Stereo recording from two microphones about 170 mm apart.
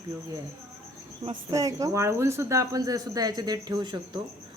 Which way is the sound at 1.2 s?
25° right (ahead or behind).